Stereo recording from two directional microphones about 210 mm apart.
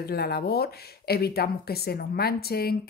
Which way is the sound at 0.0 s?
50° left (ahead or behind).